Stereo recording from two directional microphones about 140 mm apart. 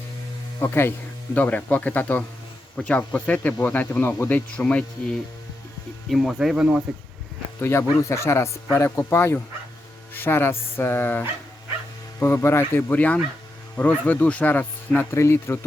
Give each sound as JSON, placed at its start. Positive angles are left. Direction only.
{"t": 0.6, "sound": "speech", "side_deg": 15}
{"t": 7.6, "sound": "speech", "side_deg": 20}
{"t": 12.2, "sound": "speech", "side_deg": 20}